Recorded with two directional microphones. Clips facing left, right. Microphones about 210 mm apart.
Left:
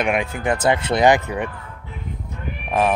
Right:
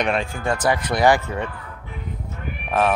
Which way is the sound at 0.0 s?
15° left (ahead or behind).